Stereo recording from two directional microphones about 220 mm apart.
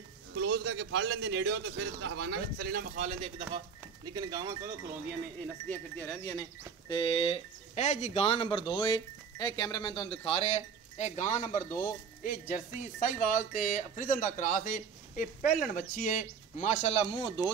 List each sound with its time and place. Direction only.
0.4 s a man's voice: 50° right (ahead or behind)
3.1 s speech: 25° right (ahead or behind)
5.7 s speech: 10° left (ahead or behind)